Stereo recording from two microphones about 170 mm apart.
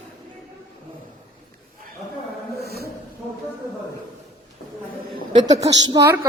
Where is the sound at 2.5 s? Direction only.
70° right (ahead or behind).